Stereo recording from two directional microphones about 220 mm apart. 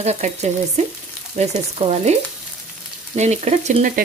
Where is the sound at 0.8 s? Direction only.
30° right (ahead or behind).